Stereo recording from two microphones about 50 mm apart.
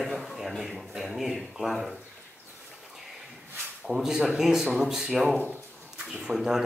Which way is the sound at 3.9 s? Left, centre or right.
Centre.